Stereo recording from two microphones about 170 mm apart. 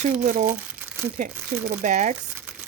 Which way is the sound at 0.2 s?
50° right (ahead or behind).